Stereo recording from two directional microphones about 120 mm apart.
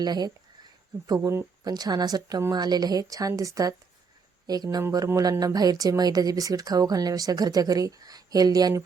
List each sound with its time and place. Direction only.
0.0 s speech: 35° right (ahead or behind)